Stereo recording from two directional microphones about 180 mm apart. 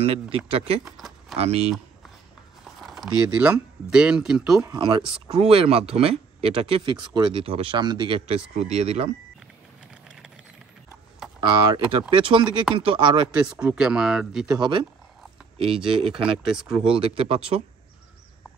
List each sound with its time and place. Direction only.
0.0 s speech: 35° right (ahead or behind)
0.8 s speech: centre (ahead or behind)
1.3 s speech: 35° right (ahead or behind)
2.6 s speech: centre (ahead or behind)
4.6 s speech: 25° right (ahead or behind)
11.4 s speech: 25° right (ahead or behind)
13.6 s speech: 5° right (ahead or behind)
14.6 s speech: 25° right (ahead or behind)
16.4 s speech: 5° right (ahead or behind)
16.9 s speech: 30° right (ahead or behind)